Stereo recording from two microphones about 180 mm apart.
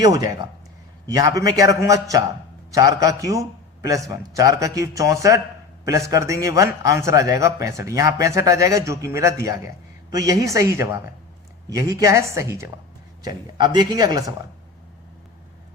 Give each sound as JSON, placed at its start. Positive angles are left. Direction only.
{"t": 0.0, "sound": "a man's voice", "side_deg": -20}